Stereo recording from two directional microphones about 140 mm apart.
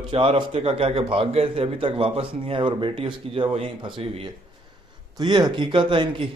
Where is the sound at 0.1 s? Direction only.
40° right (ahead or behind).